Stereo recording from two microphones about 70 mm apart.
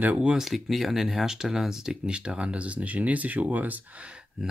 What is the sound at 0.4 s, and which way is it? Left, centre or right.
Speech, centre.